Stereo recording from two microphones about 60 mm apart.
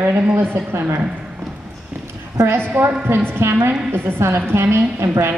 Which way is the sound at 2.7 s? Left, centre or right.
Right.